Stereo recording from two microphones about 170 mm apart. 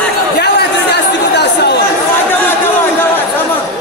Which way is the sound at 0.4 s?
75° left (ahead or behind).